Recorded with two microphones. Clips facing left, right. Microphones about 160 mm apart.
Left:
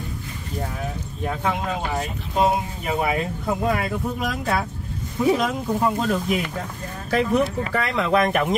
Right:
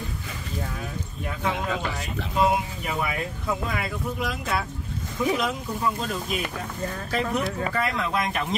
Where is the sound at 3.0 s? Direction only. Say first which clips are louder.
Left 6 dB; 45° left (ahead or behind).